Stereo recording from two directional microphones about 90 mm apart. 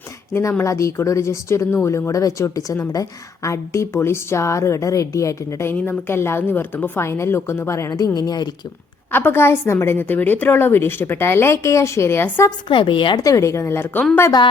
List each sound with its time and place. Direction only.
0.6 s a woman's voice: 35° left (ahead or behind)
5.7 s a woman's voice: 20° left (ahead or behind); by 8.4 s 50° left (ahead or behind)
9.1 s a woman's voice: 25° left (ahead or behind)
12.5 s a woman's voice: 65° left (ahead or behind)
13.1 s a woman's voice: 40° left (ahead or behind)